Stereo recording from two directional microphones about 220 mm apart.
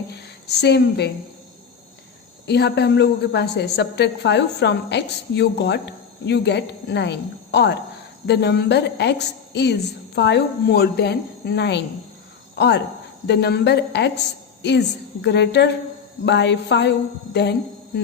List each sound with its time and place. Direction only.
0.2 s a woman's voice: 50° left (ahead or behind)
2.5 s a woman's voice: 50° left (ahead or behind)